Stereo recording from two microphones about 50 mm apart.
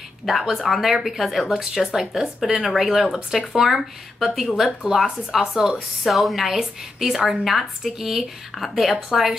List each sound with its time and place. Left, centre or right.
0.2 s a woman's voice: centre